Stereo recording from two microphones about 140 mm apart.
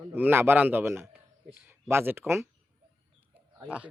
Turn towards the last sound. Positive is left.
turn(degrees=-10)  # may be behind; listen again after turning